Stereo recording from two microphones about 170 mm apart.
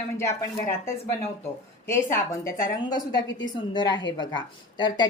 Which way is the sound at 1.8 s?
15° left (ahead or behind).